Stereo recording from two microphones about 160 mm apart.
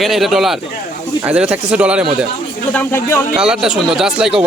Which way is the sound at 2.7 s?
15° left (ahead or behind).